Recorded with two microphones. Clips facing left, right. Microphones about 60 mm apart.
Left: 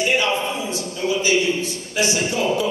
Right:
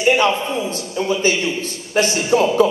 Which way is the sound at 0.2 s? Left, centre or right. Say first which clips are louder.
Right 4 dB; right.